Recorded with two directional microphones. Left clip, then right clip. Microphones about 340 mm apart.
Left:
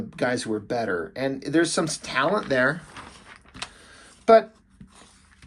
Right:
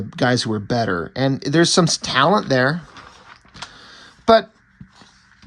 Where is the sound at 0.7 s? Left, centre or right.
Right.